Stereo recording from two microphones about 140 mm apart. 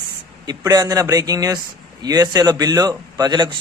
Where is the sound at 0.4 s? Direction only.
25° right (ahead or behind).